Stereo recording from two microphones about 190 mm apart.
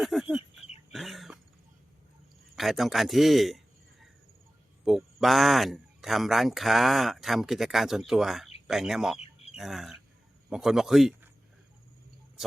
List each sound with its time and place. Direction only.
0.0 s speech: centre (ahead or behind)
0.9 s dog: centre (ahead or behind)
2.6 s speech: centre (ahead or behind)
4.9 s speech: centre (ahead or behind)
9.1 s chicken: 30° left (ahead or behind)
9.6 s speech: centre (ahead or behind)
12.4 s a sound: centre (ahead or behind)